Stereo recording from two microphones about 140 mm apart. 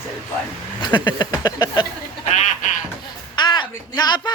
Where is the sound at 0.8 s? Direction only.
30° left (ahead or behind).